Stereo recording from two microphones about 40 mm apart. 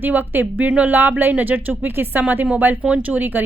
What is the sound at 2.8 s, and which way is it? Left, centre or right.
Speech, right.